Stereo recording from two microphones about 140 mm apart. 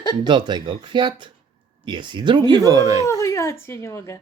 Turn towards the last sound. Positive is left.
turn(degrees=20)  # may be behind; listen again after turning